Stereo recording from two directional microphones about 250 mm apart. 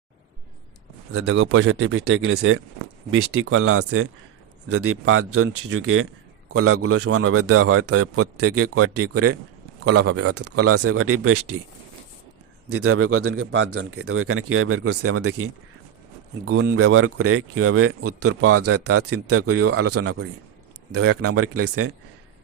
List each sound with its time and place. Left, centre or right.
1.1 s speech: right
5.6 s speech: right
6.5 s speech: right
12.6 s speech: right
16.5 s speech: right
16.7 s speech: right